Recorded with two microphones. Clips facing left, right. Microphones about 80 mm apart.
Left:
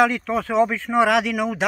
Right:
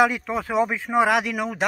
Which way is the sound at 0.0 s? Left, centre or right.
Centre.